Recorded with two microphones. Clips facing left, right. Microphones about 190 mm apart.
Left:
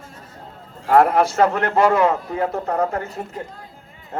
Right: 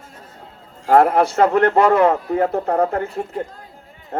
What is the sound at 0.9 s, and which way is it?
Speech, 55° right (ahead or behind).